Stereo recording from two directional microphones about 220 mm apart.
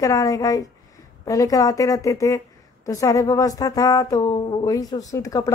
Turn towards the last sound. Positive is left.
turn(degrees=15)  # may be behind; listen again after turning